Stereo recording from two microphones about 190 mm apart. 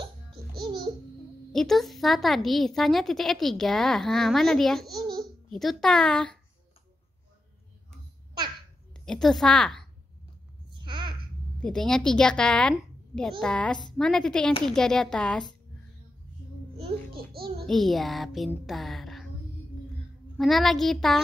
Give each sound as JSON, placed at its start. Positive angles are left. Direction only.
{"t": 1.5, "sound": "a woman's voice", "side_deg": 0}
{"t": 8.9, "sound": "a woman's voice", "side_deg": 5}
{"t": 10.7, "sound": "a sound", "side_deg": -25}
{"t": 11.6, "sound": "a child's voice", "side_deg": 5}
{"t": 16.7, "sound": "babbling", "side_deg": -25}
{"t": 17.3, "sound": "a child's voice", "side_deg": -55}
{"t": 17.6, "sound": "a woman's voice", "side_deg": 0}
{"t": 20.3, "sound": "a woman's voice", "side_deg": 0}